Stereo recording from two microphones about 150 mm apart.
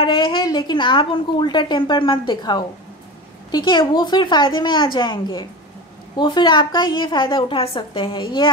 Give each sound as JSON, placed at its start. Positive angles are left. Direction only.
{"t": 0.0, "sound": "a woman's voice", "side_deg": 35}